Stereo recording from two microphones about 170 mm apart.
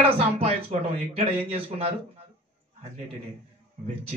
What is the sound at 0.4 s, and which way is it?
Speech, 40° right (ahead or behind).